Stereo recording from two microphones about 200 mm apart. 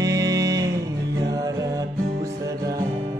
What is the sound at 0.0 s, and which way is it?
Music, 15° right (ahead or behind).